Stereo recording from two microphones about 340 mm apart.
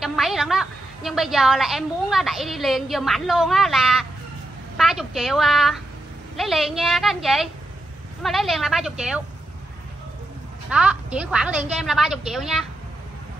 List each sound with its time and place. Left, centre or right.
0.0 s a woman's voice: centre
10.7 s a woman's voice: centre